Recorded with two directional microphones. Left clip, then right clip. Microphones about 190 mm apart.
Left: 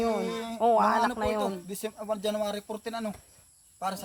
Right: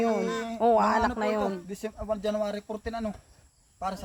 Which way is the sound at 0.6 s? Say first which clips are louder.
Even; 15° right (ahead or behind).